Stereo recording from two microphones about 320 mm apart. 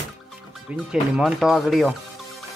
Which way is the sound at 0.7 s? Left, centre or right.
Centre.